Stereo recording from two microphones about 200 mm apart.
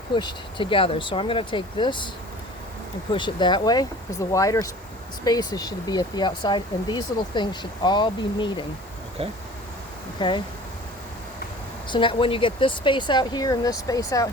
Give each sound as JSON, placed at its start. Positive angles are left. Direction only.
{"t": 0.1, "sound": "speech", "side_deg": 20}
{"t": 3.1, "sound": "speech", "side_deg": 25}
{"t": 10.2, "sound": "speech", "side_deg": 25}
{"t": 11.9, "sound": "speech", "side_deg": 25}